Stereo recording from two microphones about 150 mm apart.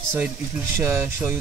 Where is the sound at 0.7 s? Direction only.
20° right (ahead or behind).